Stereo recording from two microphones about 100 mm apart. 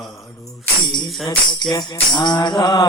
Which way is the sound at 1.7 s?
45° left (ahead or behind).